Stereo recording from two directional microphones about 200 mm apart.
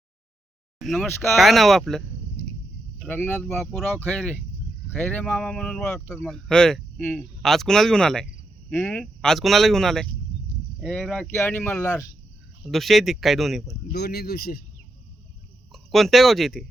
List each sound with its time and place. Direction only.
0.8 s speech: centre (ahead or behind)
12.6 s speech: centre (ahead or behind)
13.9 s speech: 50° left (ahead or behind)
15.7 s speech: centre (ahead or behind)